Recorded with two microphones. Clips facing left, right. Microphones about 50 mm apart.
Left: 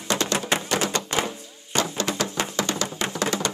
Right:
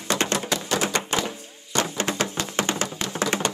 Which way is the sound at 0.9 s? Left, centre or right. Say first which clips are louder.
Right 1 dB; right.